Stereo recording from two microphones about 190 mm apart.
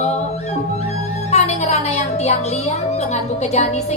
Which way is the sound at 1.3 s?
35° left (ahead or behind).